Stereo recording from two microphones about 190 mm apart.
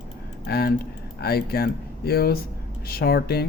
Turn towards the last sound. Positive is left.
turn(degrees=55)  # may be behind; listen again after turning